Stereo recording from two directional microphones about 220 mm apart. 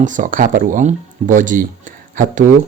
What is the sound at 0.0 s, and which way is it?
Speech, 35° right (ahead or behind).